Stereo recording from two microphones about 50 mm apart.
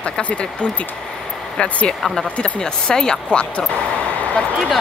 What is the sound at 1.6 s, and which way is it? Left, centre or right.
Speech, left.